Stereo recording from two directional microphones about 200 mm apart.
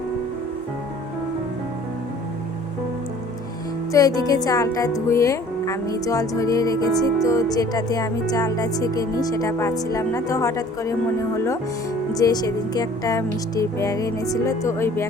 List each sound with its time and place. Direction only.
3.9 s speech: 20° left (ahead or behind)
12.1 s speech: 20° left (ahead or behind)